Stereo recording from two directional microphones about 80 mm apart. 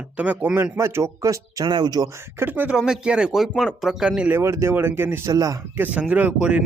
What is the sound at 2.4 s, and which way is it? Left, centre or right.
Speech, right.